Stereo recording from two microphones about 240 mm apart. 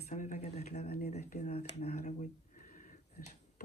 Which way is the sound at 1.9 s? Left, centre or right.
Left.